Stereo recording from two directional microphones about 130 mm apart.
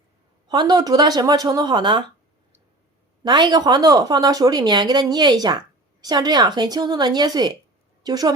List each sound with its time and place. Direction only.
0.4 s speech: 35° right (ahead or behind)
3.2 s a woman's voice: 35° right (ahead or behind)